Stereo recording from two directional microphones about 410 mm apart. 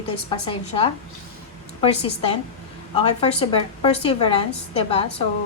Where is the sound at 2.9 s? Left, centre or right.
Centre.